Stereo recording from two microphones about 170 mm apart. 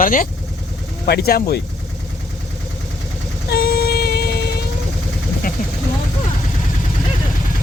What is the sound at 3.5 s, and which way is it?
Music, 65° left (ahead or behind).